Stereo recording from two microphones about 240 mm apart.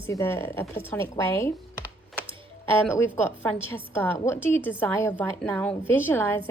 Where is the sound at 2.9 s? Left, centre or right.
Centre.